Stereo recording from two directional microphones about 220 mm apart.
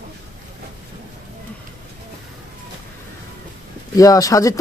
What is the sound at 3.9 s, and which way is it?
Speech, 15° left (ahead or behind).